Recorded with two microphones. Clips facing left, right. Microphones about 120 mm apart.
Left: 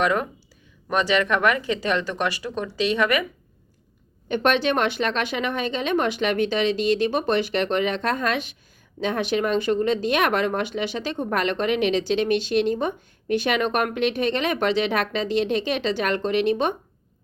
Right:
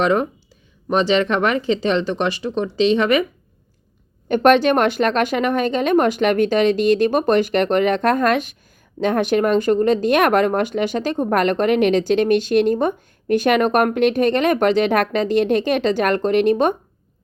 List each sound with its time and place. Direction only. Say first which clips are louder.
0.0 s speech: right 5 dB; 25° right (ahead or behind)
4.3 s speech: right 7 dB; 50° right (ahead or behind)